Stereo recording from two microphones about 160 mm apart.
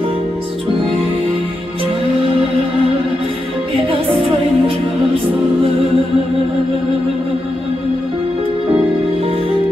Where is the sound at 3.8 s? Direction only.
35° right (ahead or behind).